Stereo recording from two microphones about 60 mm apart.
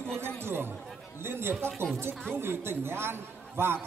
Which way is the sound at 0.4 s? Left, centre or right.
Right.